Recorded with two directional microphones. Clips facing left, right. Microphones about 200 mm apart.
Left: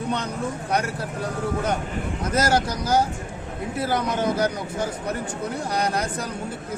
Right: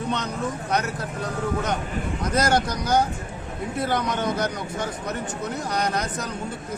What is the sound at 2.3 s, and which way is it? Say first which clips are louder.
Speech: even; 5° left (ahead or behind).